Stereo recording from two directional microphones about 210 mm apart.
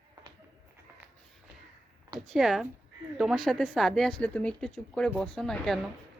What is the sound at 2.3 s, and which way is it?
A woman's voice, centre (ahead or behind).